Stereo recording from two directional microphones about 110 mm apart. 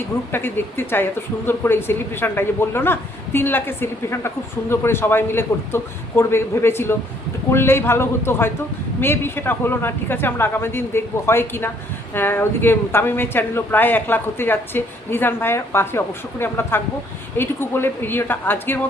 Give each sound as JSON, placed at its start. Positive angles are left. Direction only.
{"t": 0.3, "sound": "speech", "side_deg": 20}